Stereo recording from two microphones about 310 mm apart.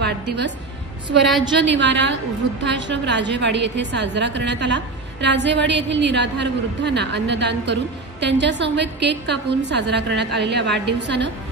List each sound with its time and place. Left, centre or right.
1.6 s a woman's voice: right